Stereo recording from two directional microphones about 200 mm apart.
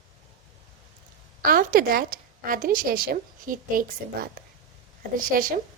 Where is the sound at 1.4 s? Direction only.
45° right (ahead or behind).